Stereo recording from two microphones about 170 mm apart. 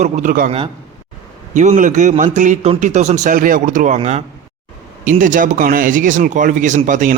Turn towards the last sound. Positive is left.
turn(degrees=-50)  # may be behind; listen again after turning